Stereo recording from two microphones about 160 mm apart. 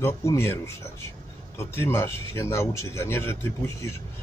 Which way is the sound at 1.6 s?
15° left (ahead or behind).